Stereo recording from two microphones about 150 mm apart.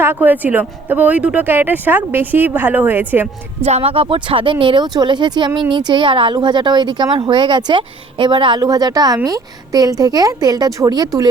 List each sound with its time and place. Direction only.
0.0 s speech: 15° right (ahead or behind)
3.6 s a woman's voice: 45° right (ahead or behind); by 11.3 s 25° right (ahead or behind)